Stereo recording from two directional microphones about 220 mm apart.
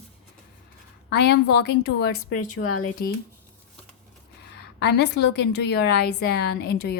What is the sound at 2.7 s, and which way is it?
Speech, 90° left.